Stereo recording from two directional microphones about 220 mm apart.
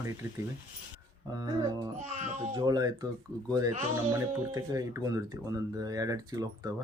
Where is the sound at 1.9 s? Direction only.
30° right (ahead or behind).